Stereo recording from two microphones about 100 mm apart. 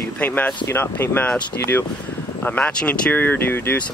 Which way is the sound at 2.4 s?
15° left (ahead or behind).